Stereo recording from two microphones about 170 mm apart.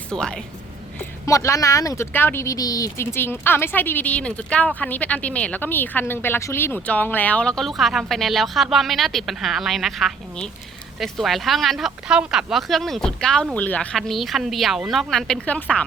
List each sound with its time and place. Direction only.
0.1 s speech: 5° left (ahead or behind)
1.3 s speech: 20° left (ahead or behind)